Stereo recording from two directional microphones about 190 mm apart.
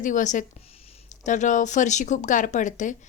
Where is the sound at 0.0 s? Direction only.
40° left (ahead or behind).